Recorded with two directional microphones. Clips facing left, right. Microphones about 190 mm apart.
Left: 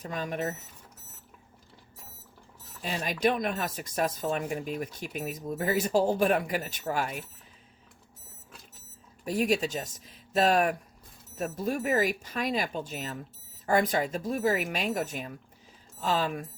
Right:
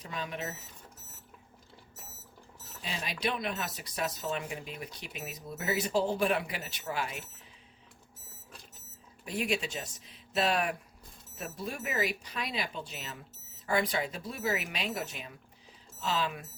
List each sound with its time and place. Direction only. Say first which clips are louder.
0.0 s speech: left 6 dB; 45° left (ahead or behind)
2.8 s speech: left 7 dB; 45° left (ahead or behind)
9.2 s speech: left 6 dB; 40° left (ahead or behind)